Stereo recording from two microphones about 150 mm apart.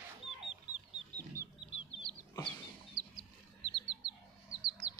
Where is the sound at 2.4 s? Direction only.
30° right (ahead or behind).